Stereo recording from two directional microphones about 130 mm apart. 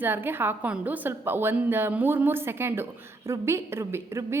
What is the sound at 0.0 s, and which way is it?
A woman's voice, 15° right (ahead or behind).